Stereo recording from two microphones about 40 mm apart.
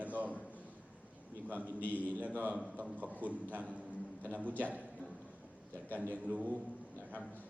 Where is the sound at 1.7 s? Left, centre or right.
Left.